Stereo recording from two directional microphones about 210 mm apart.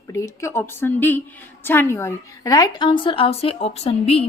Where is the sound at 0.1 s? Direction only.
15° left (ahead or behind).